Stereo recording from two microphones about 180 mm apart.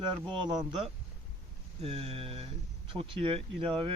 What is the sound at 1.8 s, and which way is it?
Speech, 35° right (ahead or behind).